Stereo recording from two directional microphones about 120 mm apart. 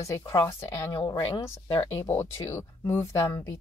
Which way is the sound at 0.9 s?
35° left (ahead or behind).